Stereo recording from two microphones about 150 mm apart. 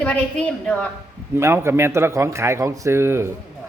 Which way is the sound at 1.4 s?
15° right (ahead or behind).